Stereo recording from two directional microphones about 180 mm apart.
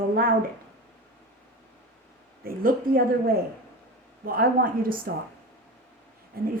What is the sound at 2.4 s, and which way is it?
Speech, 55° right (ahead or behind).